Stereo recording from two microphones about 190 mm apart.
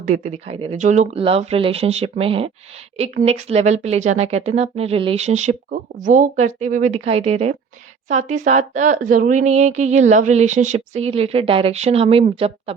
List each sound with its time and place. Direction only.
0.0 s speech: 40° right (ahead or behind)